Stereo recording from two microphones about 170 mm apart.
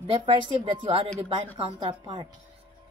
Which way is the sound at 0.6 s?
30° right (ahead or behind).